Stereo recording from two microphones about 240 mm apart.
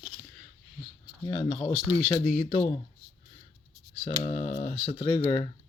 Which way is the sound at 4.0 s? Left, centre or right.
Left.